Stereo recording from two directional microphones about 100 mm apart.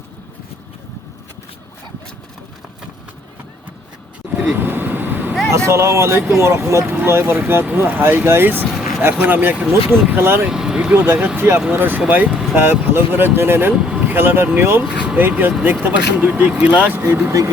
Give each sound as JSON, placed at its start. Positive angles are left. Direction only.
{"t": 4.2, "sound": "vehicle", "side_deg": -15}
{"t": 5.5, "sound": "speech", "side_deg": -30}
{"t": 10.5, "sound": "vehicle", "side_deg": -5}
{"t": 11.0, "sound": "speech", "side_deg": -20}
{"t": 12.3, "sound": "speech", "side_deg": 0}
{"t": 12.5, "sound": "speech", "side_deg": -20}
{"t": 13.8, "sound": "vehicle", "side_deg": -5}
{"t": 14.1, "sound": "speech", "side_deg": -20}
{"t": 14.8, "sound": "speech", "side_deg": -10}